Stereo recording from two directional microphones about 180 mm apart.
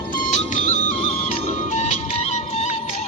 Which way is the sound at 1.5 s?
45° left (ahead or behind).